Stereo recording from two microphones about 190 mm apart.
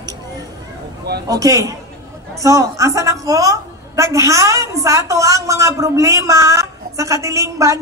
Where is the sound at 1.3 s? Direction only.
15° right (ahead or behind).